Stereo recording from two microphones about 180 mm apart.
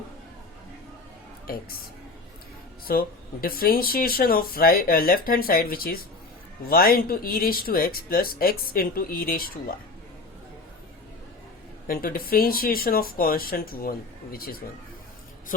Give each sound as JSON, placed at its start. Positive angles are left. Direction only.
{"t": 2.8, "sound": "speech", "side_deg": 55}
{"t": 11.9, "sound": "speech", "side_deg": 55}